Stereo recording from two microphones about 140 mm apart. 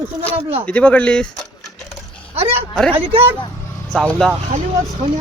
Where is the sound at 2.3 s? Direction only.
40° right (ahead or behind).